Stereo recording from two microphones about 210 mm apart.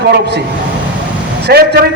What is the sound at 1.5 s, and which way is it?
Speech, 50° right (ahead or behind).